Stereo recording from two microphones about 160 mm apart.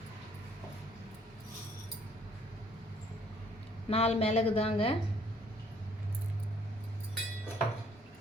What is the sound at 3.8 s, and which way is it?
A woman's voice, 40° left (ahead or behind).